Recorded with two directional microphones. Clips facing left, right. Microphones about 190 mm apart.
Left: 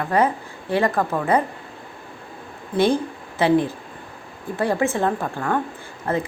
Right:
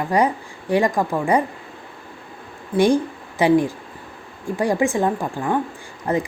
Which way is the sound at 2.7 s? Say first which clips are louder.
Right 2 dB; 15° right (ahead or behind).